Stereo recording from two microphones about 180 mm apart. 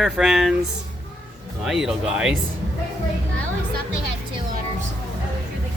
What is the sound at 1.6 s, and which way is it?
Speech, centre (ahead or behind).